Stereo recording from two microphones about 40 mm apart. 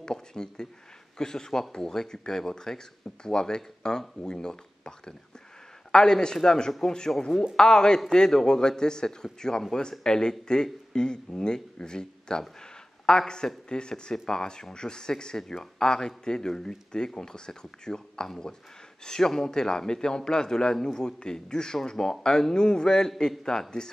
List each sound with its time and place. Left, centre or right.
0.0 s a man's voice: centre